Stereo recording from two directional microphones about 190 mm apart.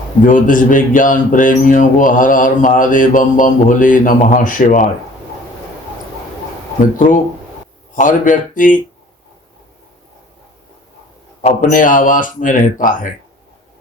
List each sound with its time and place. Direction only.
0.3 s a man's voice: 45° left (ahead or behind)
7.9 s a man's voice: 45° left (ahead or behind)
11.4 s a man's voice: 45° left (ahead or behind)